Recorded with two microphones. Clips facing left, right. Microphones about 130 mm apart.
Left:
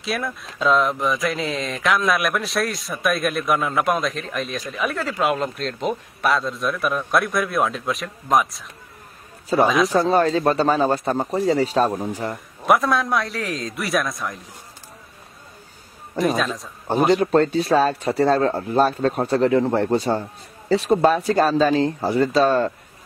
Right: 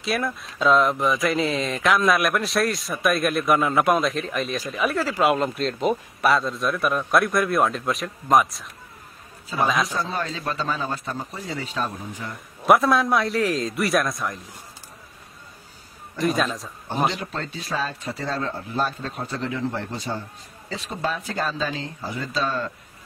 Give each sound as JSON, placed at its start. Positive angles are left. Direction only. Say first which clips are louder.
{"t": 0.0, "sound": "speech", "louder": "right 1 dB", "side_deg": 0}
{"t": 10.2, "sound": "speech", "louder": "left 10 dB", "side_deg": 50}
{"t": 12.6, "sound": "speech", "louder": "right 1 dB", "side_deg": 0}
{"t": 16.2, "sound": "speech", "louder": "left 2 dB", "side_deg": 0}
{"t": 17.1, "sound": "speech", "louder": "left 15 dB", "side_deg": 50}
{"t": 22.2, "sound": "speech", "louder": "left 9 dB", "side_deg": 60}